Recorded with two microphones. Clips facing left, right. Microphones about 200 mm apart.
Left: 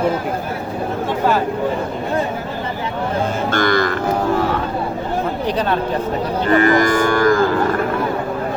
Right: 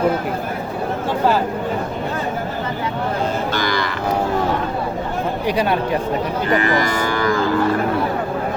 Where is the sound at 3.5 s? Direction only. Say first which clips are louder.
Left 5 dB; 50° left (ahead or behind).